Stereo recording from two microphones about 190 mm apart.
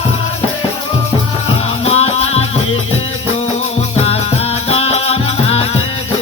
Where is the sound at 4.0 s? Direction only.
30° left (ahead or behind).